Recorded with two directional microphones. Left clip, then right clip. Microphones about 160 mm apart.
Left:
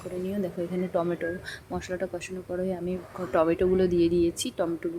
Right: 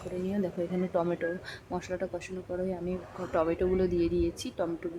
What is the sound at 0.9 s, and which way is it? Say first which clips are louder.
Speech: left 2 dB; 10° left (ahead or behind).